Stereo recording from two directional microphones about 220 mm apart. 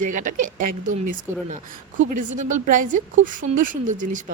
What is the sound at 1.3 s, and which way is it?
Speech, 10° right (ahead or behind).